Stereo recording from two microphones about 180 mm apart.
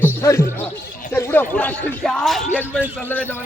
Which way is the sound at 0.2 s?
15° left (ahead or behind).